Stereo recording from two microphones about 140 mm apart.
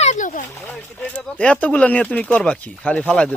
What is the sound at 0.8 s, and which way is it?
Speech, 10° left (ahead or behind).